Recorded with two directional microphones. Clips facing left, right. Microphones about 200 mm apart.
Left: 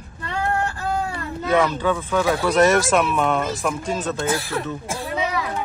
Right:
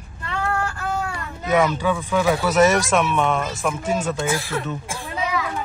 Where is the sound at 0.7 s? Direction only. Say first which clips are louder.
Left 1 dB; 35° left (ahead or behind).